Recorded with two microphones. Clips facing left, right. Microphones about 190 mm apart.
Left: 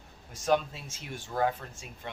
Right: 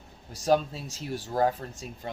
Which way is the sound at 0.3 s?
35° right (ahead or behind).